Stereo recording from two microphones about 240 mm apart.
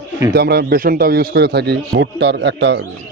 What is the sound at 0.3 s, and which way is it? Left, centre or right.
Speech, right.